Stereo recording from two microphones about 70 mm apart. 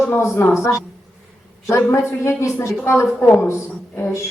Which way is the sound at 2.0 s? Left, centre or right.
Left.